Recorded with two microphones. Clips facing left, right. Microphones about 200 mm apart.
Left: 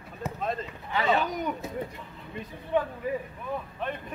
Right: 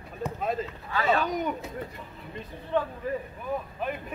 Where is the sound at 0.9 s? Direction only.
20° left (ahead or behind).